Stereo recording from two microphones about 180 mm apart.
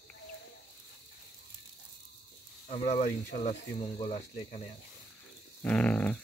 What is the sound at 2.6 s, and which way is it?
Speech, 35° left (ahead or behind).